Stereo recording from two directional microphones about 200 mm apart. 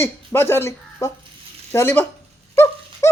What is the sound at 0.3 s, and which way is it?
Speech, 10° left (ahead or behind).